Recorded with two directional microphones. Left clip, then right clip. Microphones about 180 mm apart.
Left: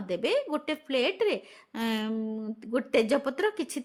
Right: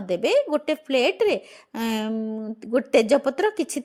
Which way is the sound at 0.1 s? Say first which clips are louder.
Right 7 dB; 25° right (ahead or behind).